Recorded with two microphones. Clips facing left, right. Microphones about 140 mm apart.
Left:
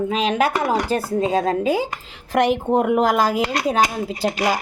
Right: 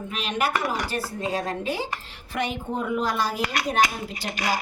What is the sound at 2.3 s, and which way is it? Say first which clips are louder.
Speech: left 11 dB; 80° left.